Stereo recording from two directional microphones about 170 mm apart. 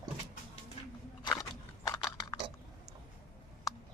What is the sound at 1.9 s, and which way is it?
Chewing, 25° left (ahead or behind).